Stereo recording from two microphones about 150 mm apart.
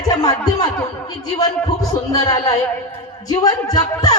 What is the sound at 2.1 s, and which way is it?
A woman's voice, 25° left (ahead or behind).